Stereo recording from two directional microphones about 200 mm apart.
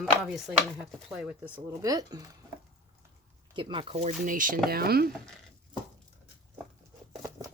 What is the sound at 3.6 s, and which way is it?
Speech, 25° right (ahead or behind).